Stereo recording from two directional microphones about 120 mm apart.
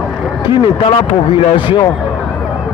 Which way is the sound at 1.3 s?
40° left (ahead or behind).